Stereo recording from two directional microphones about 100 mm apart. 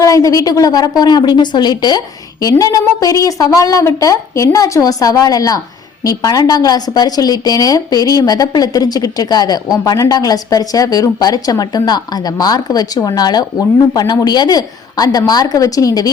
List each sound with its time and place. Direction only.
0.0 s speech: 35° left (ahead or behind)